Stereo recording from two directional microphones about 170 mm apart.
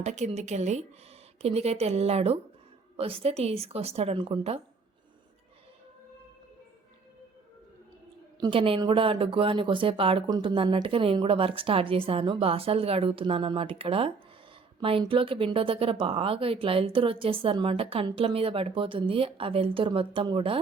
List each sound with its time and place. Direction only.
0.0 s speech: 40° right (ahead or behind)
8.4 s a woman's voice: 30° right (ahead or behind)